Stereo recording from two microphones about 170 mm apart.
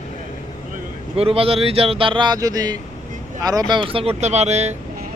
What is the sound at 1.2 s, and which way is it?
Speech, 35° right (ahead or behind).